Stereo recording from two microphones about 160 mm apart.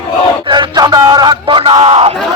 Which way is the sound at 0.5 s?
25° right (ahead or behind).